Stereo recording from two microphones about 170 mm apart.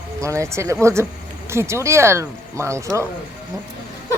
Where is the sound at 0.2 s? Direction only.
15° right (ahead or behind).